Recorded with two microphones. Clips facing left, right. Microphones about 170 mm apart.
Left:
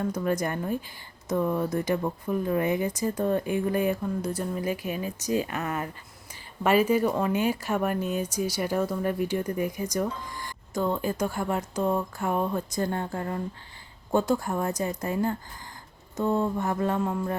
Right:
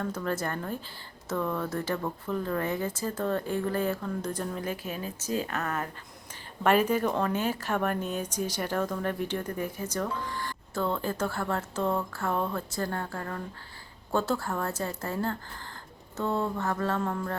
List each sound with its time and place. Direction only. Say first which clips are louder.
0.0 s a woman's voice: left 4 dB; 15° left (ahead or behind)